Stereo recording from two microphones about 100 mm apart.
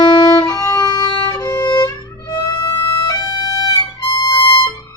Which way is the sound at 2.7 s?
35° left (ahead or behind).